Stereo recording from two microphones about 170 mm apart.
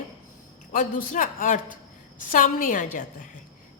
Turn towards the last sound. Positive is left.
turn(degrees=50)  # may be behind; listen again after turning